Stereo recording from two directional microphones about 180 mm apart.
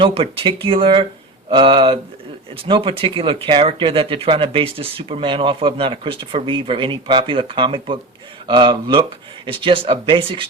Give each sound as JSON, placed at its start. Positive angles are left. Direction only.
{"t": 0.0, "sound": "speech", "side_deg": -30}